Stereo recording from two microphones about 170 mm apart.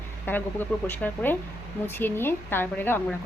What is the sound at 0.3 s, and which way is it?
A woman's voice, 10° left (ahead or behind).